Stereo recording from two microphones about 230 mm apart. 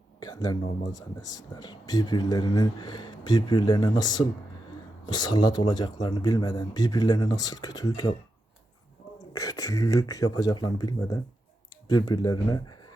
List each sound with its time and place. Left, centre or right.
0.2 s speech: centre
9.3 s speech: centre